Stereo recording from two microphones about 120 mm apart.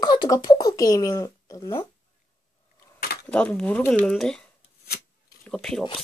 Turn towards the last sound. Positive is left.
turn(degrees=5)  # may be behind; listen again after turning